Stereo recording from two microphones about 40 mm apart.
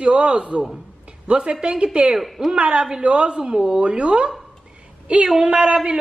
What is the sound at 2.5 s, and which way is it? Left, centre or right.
A woman's voice, right.